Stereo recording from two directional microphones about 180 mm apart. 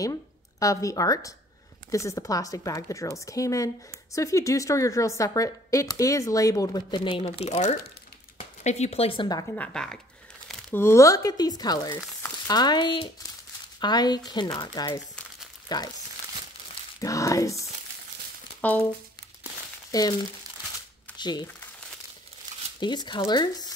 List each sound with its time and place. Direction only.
0.0 s a woman's voice: 20° left (ahead or behind)
9.6 s speech: 5° left (ahead or behind); by 15.8 s 20° left (ahead or behind)
17.0 s speech: 20° left (ahead or behind)
19.9 s speech: 20° left (ahead or behind)
21.2 s speech: 25° left (ahead or behind)
22.8 s speech: 25° left (ahead or behind)